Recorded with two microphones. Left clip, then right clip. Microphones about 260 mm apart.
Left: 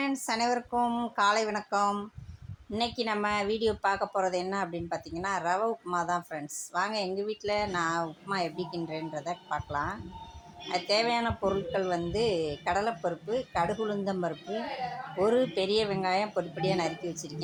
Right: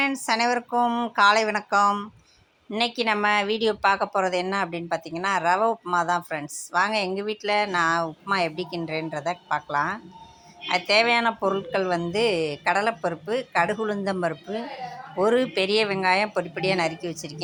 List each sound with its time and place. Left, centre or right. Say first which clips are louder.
0.0 s speech: right 7 dB; centre
14.4 s a woman's voice: right 2 dB; centre
15.3 s speech: right 5 dB; centre